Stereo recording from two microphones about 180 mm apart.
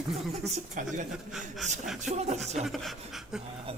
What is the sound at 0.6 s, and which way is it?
Speech, 40° right (ahead or behind).